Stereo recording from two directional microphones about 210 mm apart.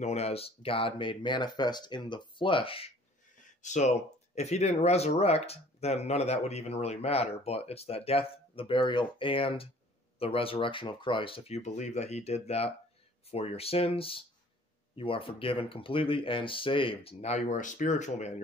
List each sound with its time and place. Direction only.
0.0 s speech: 30° left (ahead or behind)